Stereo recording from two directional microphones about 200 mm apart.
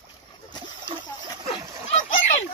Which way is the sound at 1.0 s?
30° left (ahead or behind).